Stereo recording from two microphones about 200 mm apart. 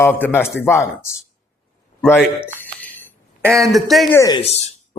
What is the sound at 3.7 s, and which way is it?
Speech, centre (ahead or behind).